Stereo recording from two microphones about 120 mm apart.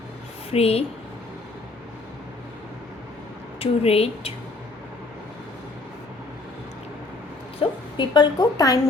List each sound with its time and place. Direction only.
0.5 s speech: 55° left (ahead or behind)
3.6 s speech: 55° left (ahead or behind)
7.6 s a woman's voice: 40° left (ahead or behind)